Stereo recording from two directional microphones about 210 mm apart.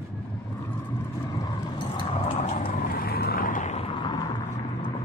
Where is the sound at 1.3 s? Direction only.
20° left (ahead or behind).